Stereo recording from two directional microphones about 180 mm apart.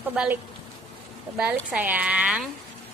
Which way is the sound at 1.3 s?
5° right (ahead or behind).